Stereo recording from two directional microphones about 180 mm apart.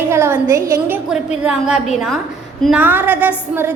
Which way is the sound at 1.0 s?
5° right (ahead or behind).